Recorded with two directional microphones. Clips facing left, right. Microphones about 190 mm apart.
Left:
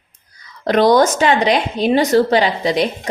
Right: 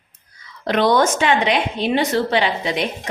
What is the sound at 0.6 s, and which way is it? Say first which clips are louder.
A woman's voice: left 4 dB; 40° left (ahead or behind).